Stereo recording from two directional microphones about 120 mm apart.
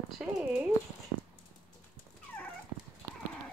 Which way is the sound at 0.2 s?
10° right (ahead or behind).